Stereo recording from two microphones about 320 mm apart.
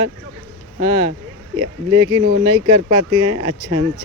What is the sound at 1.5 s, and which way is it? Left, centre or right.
Speech, centre.